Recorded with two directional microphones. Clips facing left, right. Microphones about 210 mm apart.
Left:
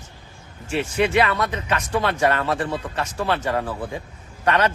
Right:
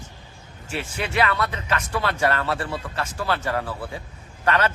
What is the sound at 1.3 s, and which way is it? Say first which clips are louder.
Speech: left 2 dB; 20° left (ahead or behind).